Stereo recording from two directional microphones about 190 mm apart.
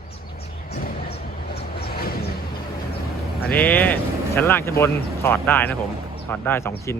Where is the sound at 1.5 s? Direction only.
50° left (ahead or behind).